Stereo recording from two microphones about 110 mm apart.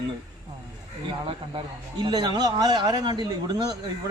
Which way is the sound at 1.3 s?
45° right (ahead or behind).